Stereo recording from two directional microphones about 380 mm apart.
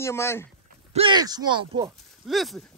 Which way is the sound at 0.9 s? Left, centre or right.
Centre.